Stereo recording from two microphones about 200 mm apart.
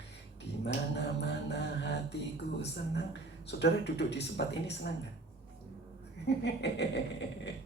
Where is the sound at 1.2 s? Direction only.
60° left (ahead or behind).